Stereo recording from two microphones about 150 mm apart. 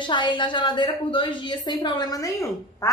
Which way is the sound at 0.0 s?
30° left (ahead or behind).